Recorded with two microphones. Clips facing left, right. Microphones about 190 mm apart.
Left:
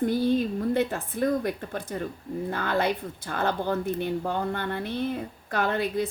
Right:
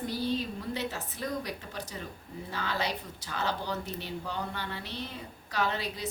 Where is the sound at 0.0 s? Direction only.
50° left (ahead or behind).